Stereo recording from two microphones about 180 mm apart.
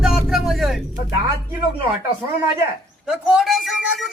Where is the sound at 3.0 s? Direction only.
Centre (ahead or behind).